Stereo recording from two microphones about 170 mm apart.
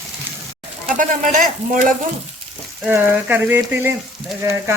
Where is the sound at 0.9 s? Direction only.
50° right (ahead or behind).